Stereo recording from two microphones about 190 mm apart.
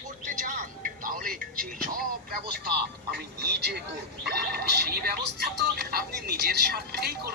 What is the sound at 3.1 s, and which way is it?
Speech, 60° right (ahead or behind).